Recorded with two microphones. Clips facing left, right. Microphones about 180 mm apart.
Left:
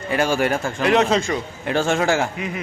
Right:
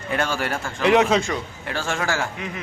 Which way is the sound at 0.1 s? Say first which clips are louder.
Left 5 dB; 10° left (ahead or behind).